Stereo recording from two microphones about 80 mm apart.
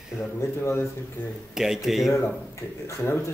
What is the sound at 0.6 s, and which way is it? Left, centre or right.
Speech, left.